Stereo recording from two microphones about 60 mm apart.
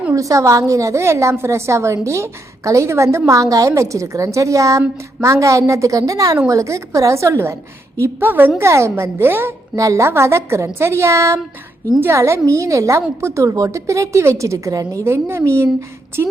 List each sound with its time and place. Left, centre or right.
0.1 s a woman's voice: right
8.2 s a woman's voice: right
8.6 s a woman's voice: right
9.7 s a woman's voice: right
10.1 s a woman's voice: right
11.9 s a woman's voice: right
12.5 s a woman's voice: right
15.0 s a woman's voice: right